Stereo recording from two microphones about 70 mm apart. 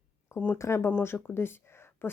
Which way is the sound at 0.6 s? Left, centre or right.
Left.